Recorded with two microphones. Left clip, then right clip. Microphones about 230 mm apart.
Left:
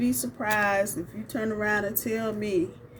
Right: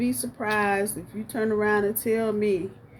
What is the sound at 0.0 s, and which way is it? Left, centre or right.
Speech, centre.